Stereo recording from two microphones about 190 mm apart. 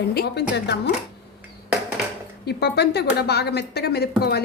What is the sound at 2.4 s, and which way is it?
A woman's voice, 60° left (ahead or behind).